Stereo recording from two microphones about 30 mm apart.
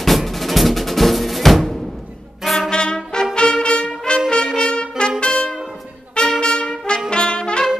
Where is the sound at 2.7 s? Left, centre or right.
Left.